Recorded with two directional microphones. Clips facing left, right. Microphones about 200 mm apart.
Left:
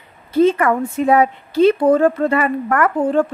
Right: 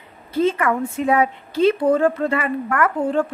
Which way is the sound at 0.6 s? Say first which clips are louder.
Left 4 dB; 40° left (ahead or behind).